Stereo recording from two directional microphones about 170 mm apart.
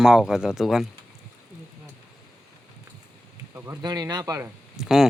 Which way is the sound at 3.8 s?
25° right (ahead or behind).